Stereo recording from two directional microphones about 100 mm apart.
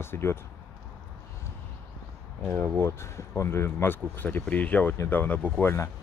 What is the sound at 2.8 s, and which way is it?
Speech, 25° left (ahead or behind).